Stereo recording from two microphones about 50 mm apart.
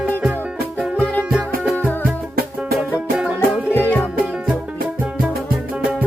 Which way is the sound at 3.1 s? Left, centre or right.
Right.